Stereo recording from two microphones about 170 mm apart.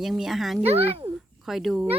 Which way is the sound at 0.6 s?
35° right (ahead or behind).